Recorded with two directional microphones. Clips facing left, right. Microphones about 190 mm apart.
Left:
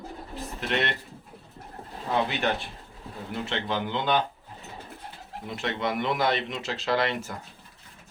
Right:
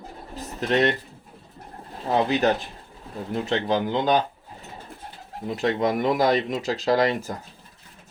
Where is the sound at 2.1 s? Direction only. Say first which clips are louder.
Right 6 dB; 40° right (ahead or behind).